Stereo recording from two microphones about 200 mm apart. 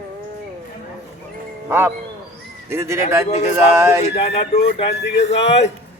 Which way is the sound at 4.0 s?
30° left (ahead or behind).